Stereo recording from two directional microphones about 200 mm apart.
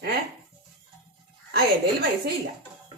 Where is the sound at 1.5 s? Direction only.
50° right (ahead or behind).